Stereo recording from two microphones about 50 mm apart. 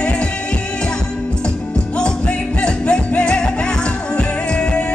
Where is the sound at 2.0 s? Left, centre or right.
Centre.